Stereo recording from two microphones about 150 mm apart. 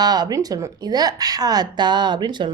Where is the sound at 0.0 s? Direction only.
25° right (ahead or behind).